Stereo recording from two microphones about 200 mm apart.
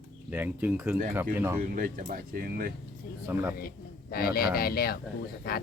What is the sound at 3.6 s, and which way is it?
Speech, 50° left (ahead or behind).